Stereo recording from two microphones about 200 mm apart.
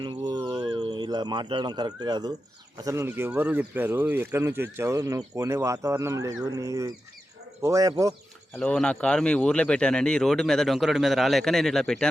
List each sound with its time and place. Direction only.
0.0 s a sound: 20° right (ahead or behind)
2.7 s speech: 15° right (ahead or behind)
8.5 s speech: 5° left (ahead or behind)